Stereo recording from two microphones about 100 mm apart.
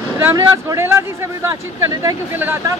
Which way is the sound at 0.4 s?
35° right (ahead or behind).